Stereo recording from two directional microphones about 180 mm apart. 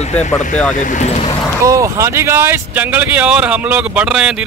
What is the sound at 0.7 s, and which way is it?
Speech, 45° left (ahead or behind).